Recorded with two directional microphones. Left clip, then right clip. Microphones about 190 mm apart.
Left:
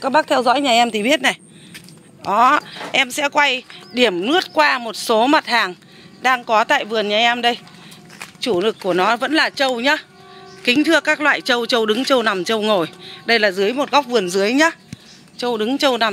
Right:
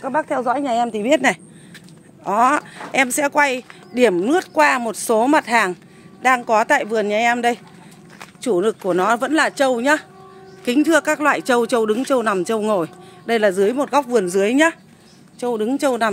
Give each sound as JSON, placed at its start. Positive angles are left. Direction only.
{"t": 0.0, "sound": "a woman's voice", "side_deg": 15}
{"t": 2.2, "sound": "speech", "side_deg": -20}
{"t": 15.3, "sound": "speech", "side_deg": -10}